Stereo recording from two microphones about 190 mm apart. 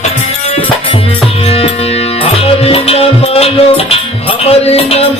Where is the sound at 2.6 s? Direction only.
30° left (ahead or behind).